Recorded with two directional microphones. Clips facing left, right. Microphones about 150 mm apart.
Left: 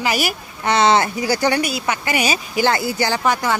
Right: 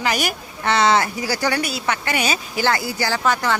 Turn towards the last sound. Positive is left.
turn(degrees=15)  # may be behind; listen again after turning